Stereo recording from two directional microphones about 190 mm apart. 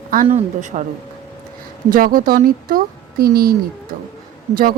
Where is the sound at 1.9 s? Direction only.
50° right (ahead or behind).